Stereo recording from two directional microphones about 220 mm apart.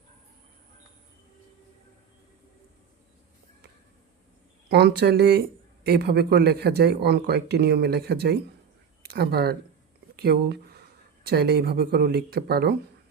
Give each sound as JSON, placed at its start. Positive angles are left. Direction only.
{"t": 4.7, "sound": "speech", "side_deg": -50}